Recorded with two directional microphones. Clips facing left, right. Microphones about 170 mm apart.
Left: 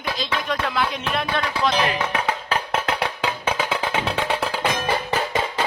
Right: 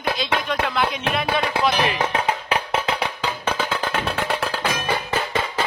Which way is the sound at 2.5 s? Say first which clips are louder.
Right 1 dB; 5° right (ahead or behind).